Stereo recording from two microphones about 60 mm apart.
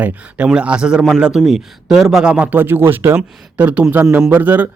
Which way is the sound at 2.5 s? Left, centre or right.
Right.